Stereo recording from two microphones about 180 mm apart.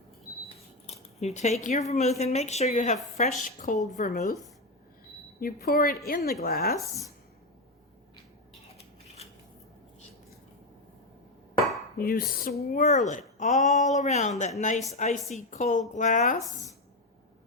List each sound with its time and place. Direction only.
0.9 s a woman's voice: 40° left (ahead or behind)
5.4 s a woman's voice: 55° left (ahead or behind)
11.9 s a woman's voice: 55° left (ahead or behind)
12.8 s a woman's voice: 40° left (ahead or behind)